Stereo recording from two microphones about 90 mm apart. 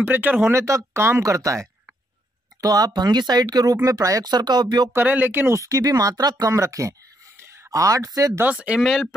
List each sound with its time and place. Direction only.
0.0 s speech: 20° right (ahead or behind); by 1.7 s 35° right (ahead or behind)
2.6 s speech: 45° right (ahead or behind)
4.9 s speech: 20° right (ahead or behind)
5.6 s speech: 40° right (ahead or behind)
8.5 s speech: 10° right (ahead or behind)
8.8 s speech: centre (ahead or behind)